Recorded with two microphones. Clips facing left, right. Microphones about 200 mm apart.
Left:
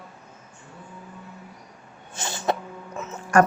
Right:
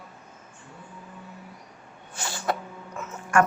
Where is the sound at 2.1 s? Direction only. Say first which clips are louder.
Left 3 dB; 20° left (ahead or behind).